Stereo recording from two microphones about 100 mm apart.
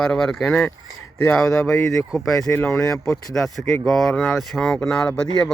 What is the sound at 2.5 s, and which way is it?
Speech, 20° left (ahead or behind).